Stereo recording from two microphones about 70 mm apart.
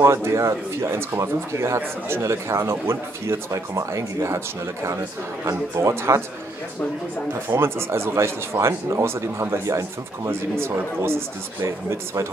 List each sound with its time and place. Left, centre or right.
0.0 s speech: right
5.4 s a man's voice: right
7.5 s speech: right